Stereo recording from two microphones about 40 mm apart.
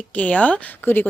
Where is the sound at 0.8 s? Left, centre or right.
Left.